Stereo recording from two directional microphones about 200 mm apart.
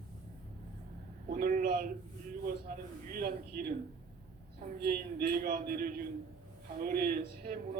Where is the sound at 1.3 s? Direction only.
40° right (ahead or behind).